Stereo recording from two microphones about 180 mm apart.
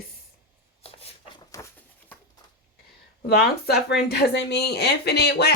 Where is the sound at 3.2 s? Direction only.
60° left (ahead or behind).